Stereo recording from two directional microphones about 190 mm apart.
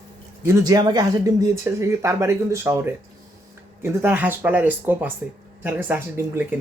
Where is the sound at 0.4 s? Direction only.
15° right (ahead or behind).